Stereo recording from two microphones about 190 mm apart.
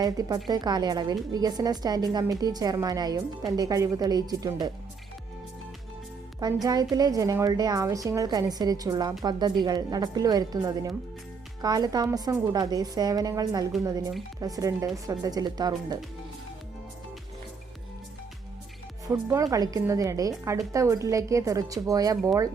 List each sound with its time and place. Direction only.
0.0 s a woman's voice: 20° right (ahead or behind)
6.4 s a woman's voice: 20° right (ahead or behind)
19.0 s a woman's voice: 15° right (ahead or behind)